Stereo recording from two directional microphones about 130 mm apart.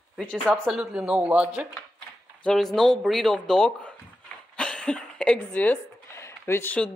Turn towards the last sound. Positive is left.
turn(degrees=20)  # may be behind; listen again after turning